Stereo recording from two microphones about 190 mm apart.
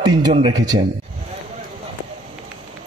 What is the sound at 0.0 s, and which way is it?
Speech, 20° right (ahead or behind).